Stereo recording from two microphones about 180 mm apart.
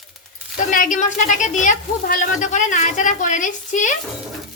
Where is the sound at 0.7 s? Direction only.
45° left (ahead or behind).